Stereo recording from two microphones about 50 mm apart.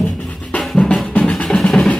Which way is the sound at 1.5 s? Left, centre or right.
Centre.